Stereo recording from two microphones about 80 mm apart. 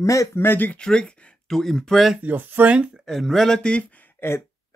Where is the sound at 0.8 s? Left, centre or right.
Centre.